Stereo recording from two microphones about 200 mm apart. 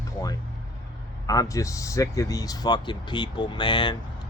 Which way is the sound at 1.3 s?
15° left (ahead or behind).